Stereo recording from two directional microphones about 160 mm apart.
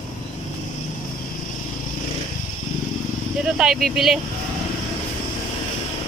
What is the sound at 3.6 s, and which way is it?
Speech, centre (ahead or behind).